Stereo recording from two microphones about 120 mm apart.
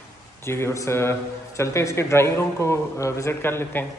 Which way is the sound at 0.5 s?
20° left (ahead or behind).